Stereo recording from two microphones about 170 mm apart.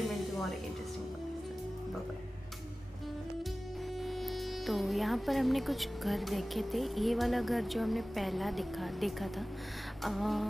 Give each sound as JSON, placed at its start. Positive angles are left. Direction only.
{"t": 0.1, "sound": "music", "side_deg": 0}
{"t": 4.0, "sound": "speech", "side_deg": 0}